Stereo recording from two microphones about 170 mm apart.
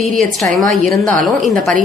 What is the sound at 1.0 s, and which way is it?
Speech, 5° left (ahead or behind).